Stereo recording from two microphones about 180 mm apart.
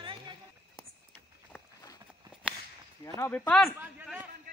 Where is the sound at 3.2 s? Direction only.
10° left (ahead or behind).